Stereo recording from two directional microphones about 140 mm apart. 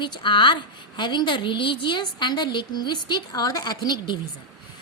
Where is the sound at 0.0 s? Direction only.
35° left (ahead or behind).